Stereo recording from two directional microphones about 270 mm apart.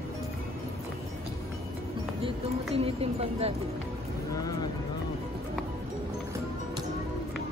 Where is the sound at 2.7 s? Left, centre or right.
Right.